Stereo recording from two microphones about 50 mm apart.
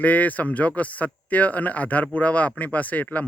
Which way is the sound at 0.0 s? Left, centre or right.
Left.